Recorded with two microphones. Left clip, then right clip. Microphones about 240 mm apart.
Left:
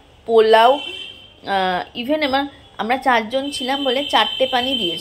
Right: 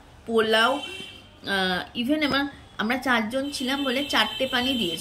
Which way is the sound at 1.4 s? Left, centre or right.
Centre.